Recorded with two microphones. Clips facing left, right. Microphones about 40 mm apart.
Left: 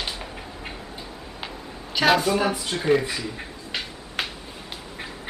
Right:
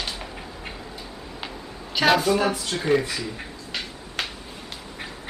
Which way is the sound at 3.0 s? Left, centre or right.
Centre.